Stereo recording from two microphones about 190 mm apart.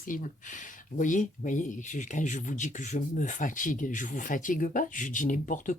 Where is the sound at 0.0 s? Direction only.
45° left (ahead or behind).